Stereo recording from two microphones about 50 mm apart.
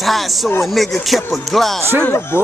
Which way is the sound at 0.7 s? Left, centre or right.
Centre.